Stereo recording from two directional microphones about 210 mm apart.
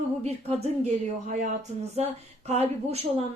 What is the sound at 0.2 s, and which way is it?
Speech, 30° right (ahead or behind).